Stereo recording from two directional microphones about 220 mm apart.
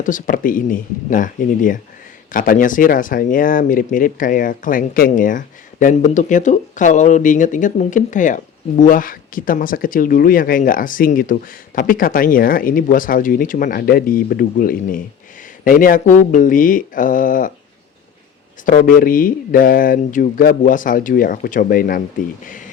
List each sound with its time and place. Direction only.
0.0 s speech: 35° left (ahead or behind)
18.6 s speech: 35° left (ahead or behind)